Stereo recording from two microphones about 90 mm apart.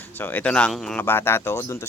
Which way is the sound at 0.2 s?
20° left (ahead or behind).